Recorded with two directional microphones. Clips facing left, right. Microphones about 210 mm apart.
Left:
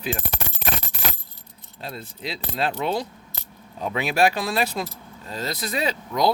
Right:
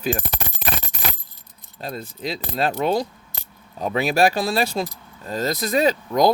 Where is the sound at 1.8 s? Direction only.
45° right (ahead or behind).